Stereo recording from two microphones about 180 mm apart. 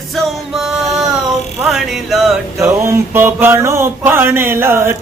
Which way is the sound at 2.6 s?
15° right (ahead or behind).